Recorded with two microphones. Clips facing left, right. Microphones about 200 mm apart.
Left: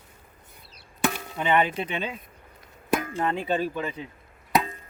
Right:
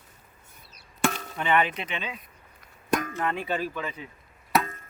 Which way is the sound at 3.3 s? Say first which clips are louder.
Left 3 dB; 25° left (ahead or behind).